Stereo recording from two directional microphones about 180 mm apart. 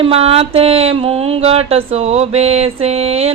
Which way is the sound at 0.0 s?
35° right (ahead or behind).